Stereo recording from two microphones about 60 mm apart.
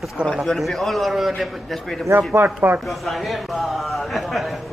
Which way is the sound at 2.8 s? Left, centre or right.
Centre.